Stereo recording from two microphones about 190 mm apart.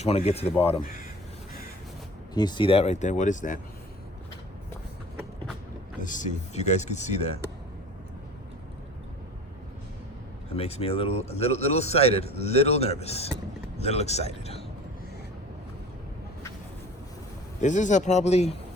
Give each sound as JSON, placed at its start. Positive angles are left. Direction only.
{"t": 0.0, "sound": "a man's voice", "side_deg": 35}
{"t": 2.3, "sound": "a man's voice", "side_deg": 20}
{"t": 6.0, "sound": "a man's voice", "side_deg": 40}
{"t": 10.5, "sound": "a man's voice", "side_deg": 30}
{"t": 17.6, "sound": "a man's voice", "side_deg": 40}